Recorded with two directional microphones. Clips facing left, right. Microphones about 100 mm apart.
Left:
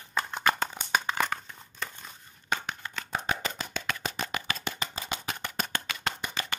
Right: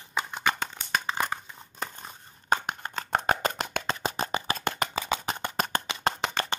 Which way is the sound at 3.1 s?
45° right (ahead or behind).